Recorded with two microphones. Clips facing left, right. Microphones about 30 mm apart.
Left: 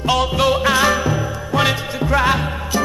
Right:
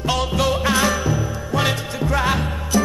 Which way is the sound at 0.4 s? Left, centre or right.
Centre.